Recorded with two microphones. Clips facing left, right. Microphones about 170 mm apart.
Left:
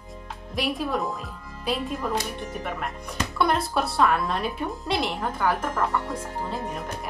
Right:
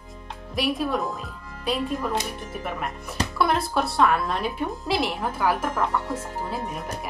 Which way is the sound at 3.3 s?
Centre (ahead or behind).